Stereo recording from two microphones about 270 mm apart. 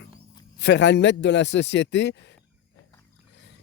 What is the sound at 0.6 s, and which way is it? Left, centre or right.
Speech, left.